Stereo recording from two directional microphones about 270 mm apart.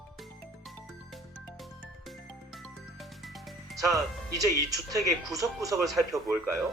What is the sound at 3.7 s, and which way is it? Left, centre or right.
Speech, centre.